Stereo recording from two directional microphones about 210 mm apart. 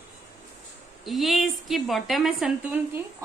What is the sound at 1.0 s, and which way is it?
A woman's voice, centre (ahead or behind).